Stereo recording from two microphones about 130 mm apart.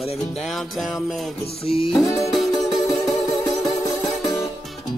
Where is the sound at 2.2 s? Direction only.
Centre (ahead or behind).